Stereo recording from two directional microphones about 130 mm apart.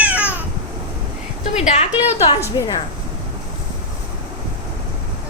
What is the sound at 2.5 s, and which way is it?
Speech, 35° left (ahead or behind).